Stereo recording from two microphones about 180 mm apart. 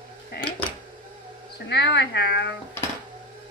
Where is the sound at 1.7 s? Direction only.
70° left (ahead or behind).